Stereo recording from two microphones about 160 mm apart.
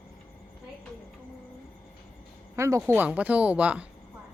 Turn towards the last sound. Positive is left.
turn(degrees=-10)  # may be behind; listen again after turning